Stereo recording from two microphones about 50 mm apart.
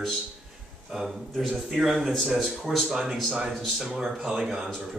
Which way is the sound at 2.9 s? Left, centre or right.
Centre.